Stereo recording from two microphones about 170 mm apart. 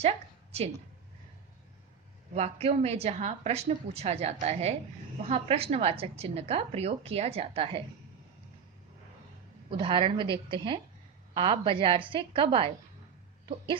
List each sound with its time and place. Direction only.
2.3 s a woman's voice: 40° right (ahead or behind)
9.6 s a woman's voice: 30° right (ahead or behind)